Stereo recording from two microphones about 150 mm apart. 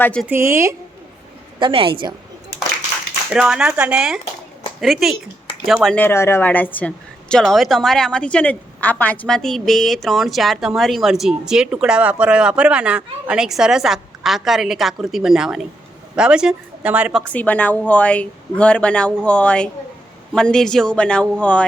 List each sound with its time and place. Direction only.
0.0 s speech: 5° left (ahead or behind)
0.3 s a woman's voice: 15° right (ahead or behind)
1.5 s a woman's voice: 35° right (ahead or behind)
3.3 s a woman's voice: 5° right (ahead or behind)
6.0 s a woman's voice: 15° left (ahead or behind); by 17.2 s 5° right (ahead or behind)
17.2 s a woman's voice: 10° left (ahead or behind)